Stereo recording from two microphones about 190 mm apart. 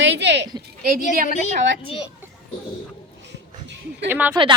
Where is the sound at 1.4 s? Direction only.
30° left (ahead or behind).